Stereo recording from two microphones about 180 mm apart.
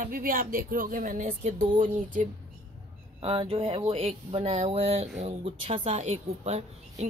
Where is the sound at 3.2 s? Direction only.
30° right (ahead or behind).